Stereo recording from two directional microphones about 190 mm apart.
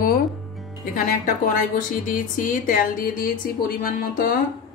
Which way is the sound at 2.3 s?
45° left (ahead or behind).